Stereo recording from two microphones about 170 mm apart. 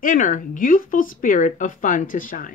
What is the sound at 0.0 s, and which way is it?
Speech, 50° left (ahead or behind).